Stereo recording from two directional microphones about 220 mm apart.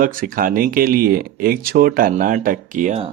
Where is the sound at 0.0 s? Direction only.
40° right (ahead or behind).